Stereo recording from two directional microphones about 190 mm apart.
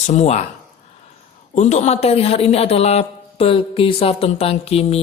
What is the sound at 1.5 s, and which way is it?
A man's voice, 40° left (ahead or behind).